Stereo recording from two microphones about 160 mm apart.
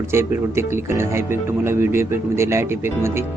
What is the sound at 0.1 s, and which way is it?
Speech, 15° right (ahead or behind).